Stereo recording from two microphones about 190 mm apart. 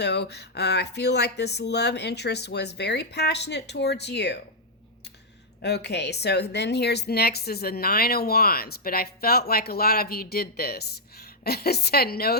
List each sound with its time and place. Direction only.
0.0 s a woman's voice: 60° left (ahead or behind)
5.6 s a woman's voice: 60° left (ahead or behind)